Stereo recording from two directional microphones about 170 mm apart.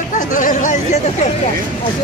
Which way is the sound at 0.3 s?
50° left (ahead or behind).